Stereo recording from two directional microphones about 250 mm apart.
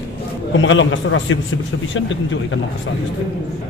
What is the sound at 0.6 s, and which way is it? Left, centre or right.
Speech, left.